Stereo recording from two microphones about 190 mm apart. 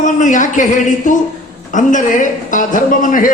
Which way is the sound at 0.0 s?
40° left (ahead or behind).